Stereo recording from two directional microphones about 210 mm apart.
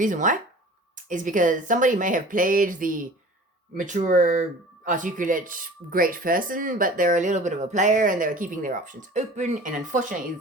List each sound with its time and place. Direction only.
0.0 s speech: 35° right (ahead or behind)